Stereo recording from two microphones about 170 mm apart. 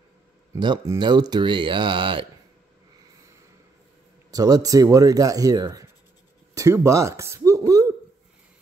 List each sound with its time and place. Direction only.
0.6 s speech: 25° right (ahead or behind)
4.3 s speech: 20° right (ahead or behind)